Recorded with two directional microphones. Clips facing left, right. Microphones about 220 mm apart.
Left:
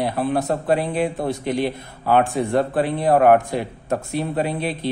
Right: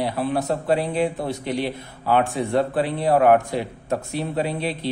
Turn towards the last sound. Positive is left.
turn(degrees=50)  # may be behind; listen again after turning